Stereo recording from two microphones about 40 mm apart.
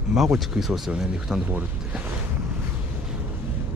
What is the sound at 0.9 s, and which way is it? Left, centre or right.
Speech, centre.